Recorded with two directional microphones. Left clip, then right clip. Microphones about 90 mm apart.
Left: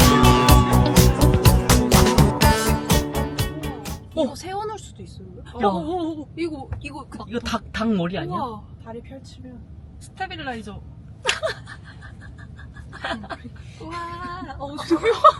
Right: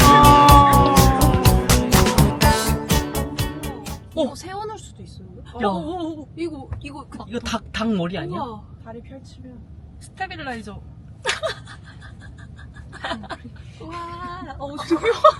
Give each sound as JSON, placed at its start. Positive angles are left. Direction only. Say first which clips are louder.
{"t": 0.0, "sound": "music", "louder": "right 6 dB", "side_deg": 0}
{"t": 4.3, "sound": "music", "louder": "left 2 dB", "side_deg": 20}
{"t": 5.5, "sound": "speech", "louder": "left 2 dB", "side_deg": 0}
{"t": 6.7, "sound": "speech", "louder": "left 1 dB", "side_deg": 15}
{"t": 7.3, "sound": "speech", "louder": "even", "side_deg": -5}
{"t": 10.2, "sound": "speech", "louder": "even", "side_deg": 0}
{"t": 11.2, "sound": "a sound", "louder": "left 1 dB", "side_deg": -20}
{"t": 12.9, "sound": "speech", "louder": "even", "side_deg": -25}
{"t": 14.5, "sound": "speech", "louder": "even", "side_deg": 0}